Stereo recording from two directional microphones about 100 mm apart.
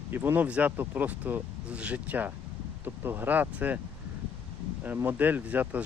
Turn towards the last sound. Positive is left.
turn(degrees=-15)  # may be behind; listen again after turning